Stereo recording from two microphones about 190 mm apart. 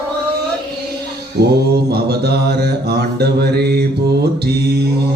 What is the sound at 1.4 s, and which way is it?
Mantra, 60° right (ahead or behind).